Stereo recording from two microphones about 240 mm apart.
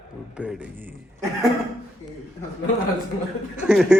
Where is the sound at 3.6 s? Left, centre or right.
Centre.